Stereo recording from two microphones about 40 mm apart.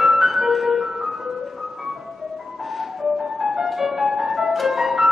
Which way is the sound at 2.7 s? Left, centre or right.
Centre.